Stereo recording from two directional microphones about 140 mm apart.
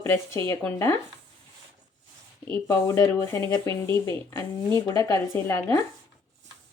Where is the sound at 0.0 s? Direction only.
15° left (ahead or behind).